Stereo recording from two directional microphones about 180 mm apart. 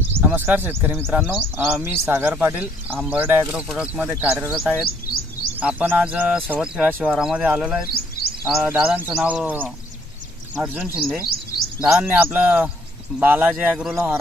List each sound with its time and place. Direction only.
0.1 s speech: 10° right (ahead or behind)
4.6 s speech: centre (ahead or behind)
4.8 s chirp: 55° left (ahead or behind)
5.6 s speech: 10° right (ahead or behind)